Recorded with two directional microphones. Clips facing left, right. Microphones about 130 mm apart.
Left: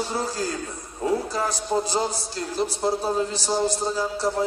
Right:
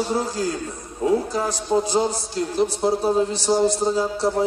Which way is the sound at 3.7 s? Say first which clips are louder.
Right 4 dB; 20° right (ahead or behind).